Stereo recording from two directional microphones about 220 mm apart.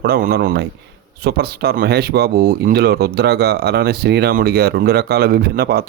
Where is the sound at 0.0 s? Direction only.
45° right (ahead or behind).